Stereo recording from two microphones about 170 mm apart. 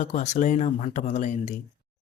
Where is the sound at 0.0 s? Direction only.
45° left (ahead or behind).